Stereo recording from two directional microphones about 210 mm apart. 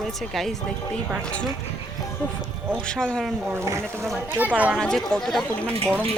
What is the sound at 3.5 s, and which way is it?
Speech, 15° right (ahead or behind).